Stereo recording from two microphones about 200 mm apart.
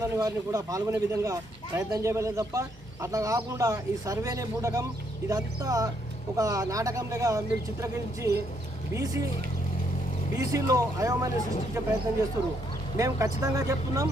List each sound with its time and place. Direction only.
0.0 s speech: 20° right (ahead or behind)
10.3 s speech: 15° right (ahead or behind)
13.0 s speech: 15° right (ahead or behind)